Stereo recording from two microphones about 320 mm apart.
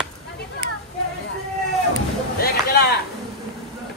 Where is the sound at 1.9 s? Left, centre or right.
Left.